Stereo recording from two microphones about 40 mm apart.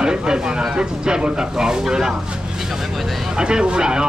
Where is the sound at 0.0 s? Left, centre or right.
Right.